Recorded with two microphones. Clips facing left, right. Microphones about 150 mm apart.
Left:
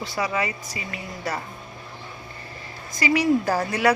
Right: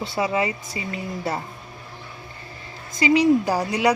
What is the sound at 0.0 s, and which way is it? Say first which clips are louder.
Speech: right 3 dB; 25° right (ahead or behind).